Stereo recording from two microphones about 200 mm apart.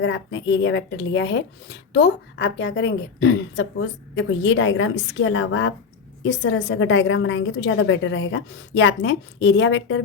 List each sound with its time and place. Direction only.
0.0 s speech: 70° left (ahead or behind)
6.2 s a woman's voice: 60° left (ahead or behind)